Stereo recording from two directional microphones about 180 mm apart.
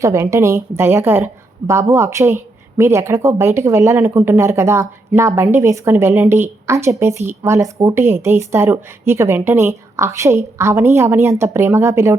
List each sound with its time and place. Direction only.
0.0 s a woman's voice: 15° right (ahead or behind)